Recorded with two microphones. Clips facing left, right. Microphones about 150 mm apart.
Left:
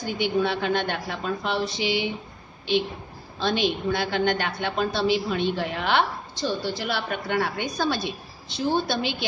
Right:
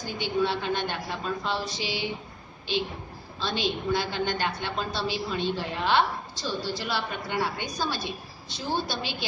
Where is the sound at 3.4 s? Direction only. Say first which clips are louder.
Left 5 dB; 65° left (ahead or behind).